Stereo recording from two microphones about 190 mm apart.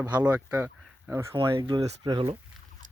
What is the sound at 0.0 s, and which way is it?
Speech, 10° right (ahead or behind).